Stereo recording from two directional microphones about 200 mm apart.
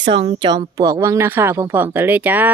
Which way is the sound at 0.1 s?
25° right (ahead or behind).